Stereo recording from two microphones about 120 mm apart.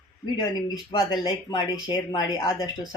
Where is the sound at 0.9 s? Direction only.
35° left (ahead or behind).